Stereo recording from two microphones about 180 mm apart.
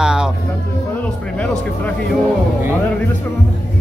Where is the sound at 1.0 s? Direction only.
10° left (ahead or behind).